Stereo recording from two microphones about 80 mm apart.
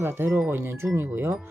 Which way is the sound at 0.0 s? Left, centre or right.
Right.